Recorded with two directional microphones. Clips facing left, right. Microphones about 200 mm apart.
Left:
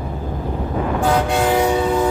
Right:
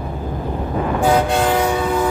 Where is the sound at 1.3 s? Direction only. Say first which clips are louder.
Left 1 dB; 10° left (ahead or behind).